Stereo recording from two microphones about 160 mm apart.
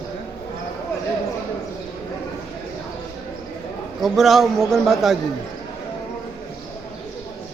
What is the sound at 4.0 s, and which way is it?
A man's voice, centre (ahead or behind).